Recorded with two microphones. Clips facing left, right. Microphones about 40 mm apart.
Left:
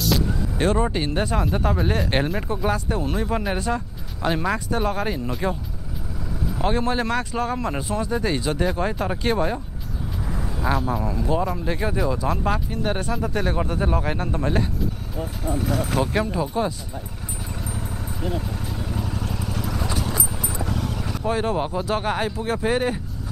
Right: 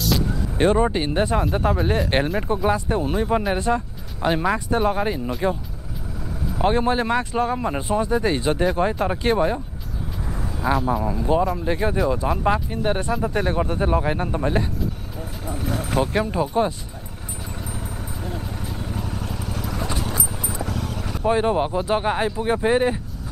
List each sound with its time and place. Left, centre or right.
0.6 s speech: centre
6.6 s speech: centre
8.6 s speech: centre
10.6 s speech: centre
15.9 s speech: centre
16.3 s speech: centre
18.5 s vehicle: centre
20.4 s a sound: centre
21.2 s speech: centre